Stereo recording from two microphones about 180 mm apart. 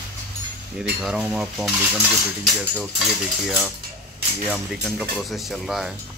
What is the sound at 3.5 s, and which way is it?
Speech, 5° right (ahead or behind).